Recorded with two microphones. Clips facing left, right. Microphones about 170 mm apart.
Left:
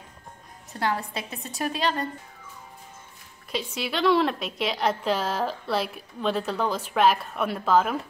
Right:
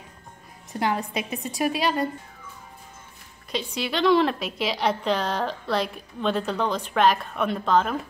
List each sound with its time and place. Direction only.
0.7 s a woman's voice: 15° right (ahead or behind)
3.5 s a woman's voice: centre (ahead or behind)